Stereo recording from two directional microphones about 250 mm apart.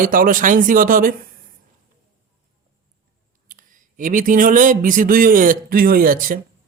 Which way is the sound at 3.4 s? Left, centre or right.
Right.